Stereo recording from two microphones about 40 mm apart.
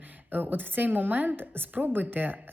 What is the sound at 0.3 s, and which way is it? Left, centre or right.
A woman's voice, right.